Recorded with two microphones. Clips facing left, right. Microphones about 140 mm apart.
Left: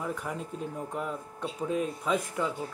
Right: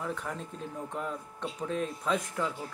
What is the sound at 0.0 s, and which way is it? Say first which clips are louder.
Speech: left 2 dB; 10° left (ahead or behind).